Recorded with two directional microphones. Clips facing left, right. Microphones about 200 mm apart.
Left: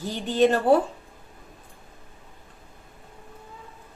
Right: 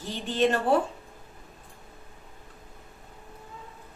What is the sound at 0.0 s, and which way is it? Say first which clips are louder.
Speech: left 5 dB; 40° left (ahead or behind).